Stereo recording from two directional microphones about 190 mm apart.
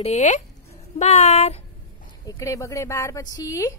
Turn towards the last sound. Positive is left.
turn(degrees=15)  # may be behind; listen again after turning